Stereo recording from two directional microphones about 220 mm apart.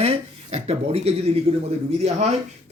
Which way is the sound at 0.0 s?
30° right (ahead or behind).